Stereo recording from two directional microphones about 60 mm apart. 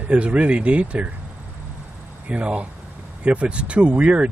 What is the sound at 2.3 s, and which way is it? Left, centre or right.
Speech, right.